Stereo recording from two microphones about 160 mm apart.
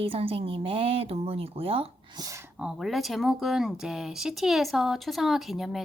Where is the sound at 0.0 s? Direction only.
35° right (ahead or behind).